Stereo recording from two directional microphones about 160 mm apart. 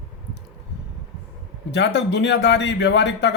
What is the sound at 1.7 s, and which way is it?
A man's voice, 90° left.